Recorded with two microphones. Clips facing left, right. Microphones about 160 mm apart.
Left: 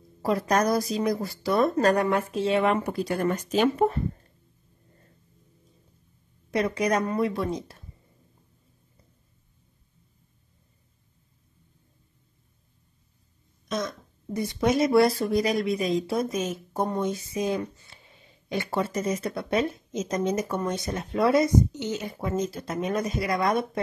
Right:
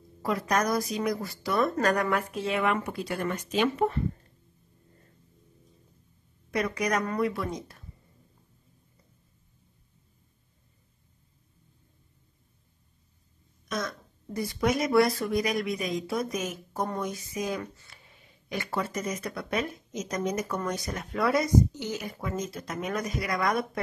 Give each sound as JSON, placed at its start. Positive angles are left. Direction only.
{"t": 0.2, "sound": "a woman's voice", "side_deg": 30}
{"t": 6.5, "sound": "speech", "side_deg": 30}
{"t": 13.7, "sound": "speech", "side_deg": 20}